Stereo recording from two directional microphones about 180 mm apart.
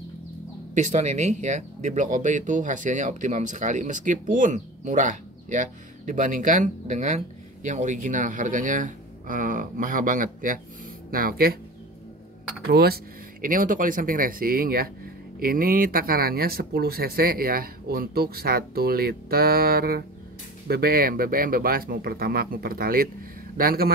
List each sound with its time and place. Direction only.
0.7 s speech: 40° right (ahead or behind)
12.6 s speech: 60° right (ahead or behind)